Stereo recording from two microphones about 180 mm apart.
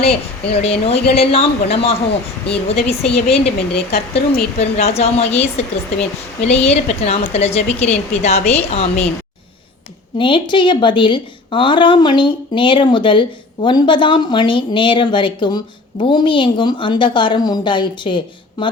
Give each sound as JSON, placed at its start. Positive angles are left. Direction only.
{"t": 0.0, "sound": "a woman's voice", "side_deg": 35}
{"t": 10.2, "sound": "a woman's voice", "side_deg": 30}